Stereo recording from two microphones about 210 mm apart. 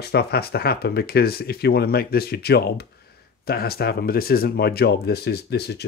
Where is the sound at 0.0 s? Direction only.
50° left (ahead or behind).